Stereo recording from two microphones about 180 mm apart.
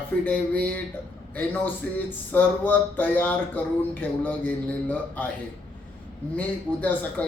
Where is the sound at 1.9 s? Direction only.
10° left (ahead or behind).